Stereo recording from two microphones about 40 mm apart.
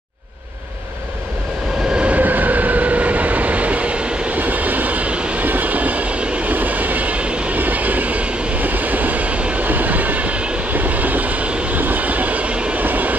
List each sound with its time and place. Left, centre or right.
2.0 s train: right
2.2 s vehicle: right
4.4 s train: right
5.4 s train: right
6.5 s train: right
7.5 s train: right
9.7 s train: right
10.7 s train: right
11.7 s vehicle: right
12.7 s train: right